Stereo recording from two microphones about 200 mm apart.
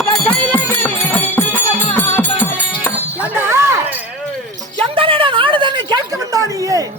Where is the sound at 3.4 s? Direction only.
15° right (ahead or behind).